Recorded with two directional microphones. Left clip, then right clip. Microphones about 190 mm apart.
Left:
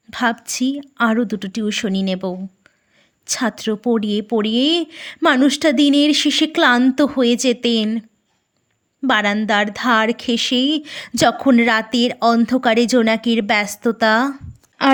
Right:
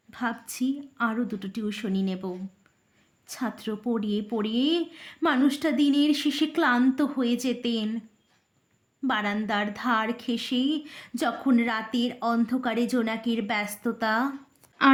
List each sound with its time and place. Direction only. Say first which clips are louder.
0.1 s speech: left 12 dB; 50° left (ahead or behind)